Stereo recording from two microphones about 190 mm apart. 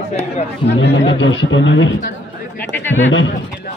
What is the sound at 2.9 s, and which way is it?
Speech, 90° left.